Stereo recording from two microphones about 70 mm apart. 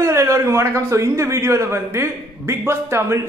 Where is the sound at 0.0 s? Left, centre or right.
Right.